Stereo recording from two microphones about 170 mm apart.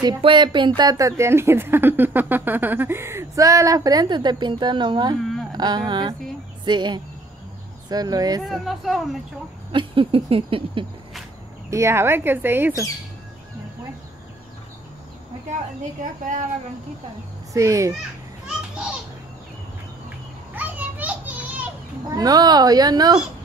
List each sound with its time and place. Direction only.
0.0 s a woman's voice: 25° right (ahead or behind)
8.5 s speech: centre (ahead or behind)
9.7 s a sound: 30° right (ahead or behind)
11.7 s speech: 15° right (ahead or behind)
16.0 s speech: 45° right (ahead or behind)
17.5 s a woman's voice: 20° right (ahead or behind)
20.5 s children playing: 10° right (ahead or behind)
22.1 s a woman's voice: 20° right (ahead or behind)